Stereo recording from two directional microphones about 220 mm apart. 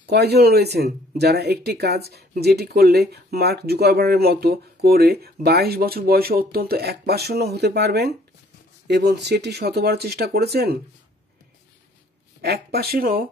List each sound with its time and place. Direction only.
0.1 s speech: 50° right (ahead or behind)
12.4 s speech: 45° right (ahead or behind)